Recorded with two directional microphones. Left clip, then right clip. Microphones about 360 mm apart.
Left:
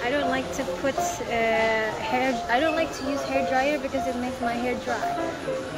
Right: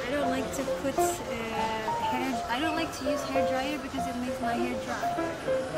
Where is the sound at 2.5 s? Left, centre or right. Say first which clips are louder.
Left 7 dB; centre.